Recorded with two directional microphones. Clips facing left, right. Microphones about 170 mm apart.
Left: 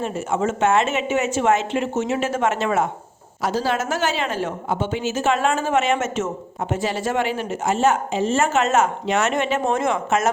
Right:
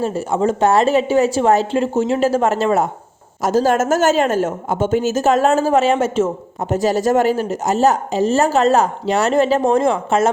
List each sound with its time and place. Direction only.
0.0 s a woman's voice: 35° right (ahead or behind)